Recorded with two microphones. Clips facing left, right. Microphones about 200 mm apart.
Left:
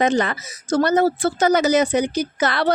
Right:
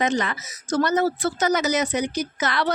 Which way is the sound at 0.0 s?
35° left (ahead or behind).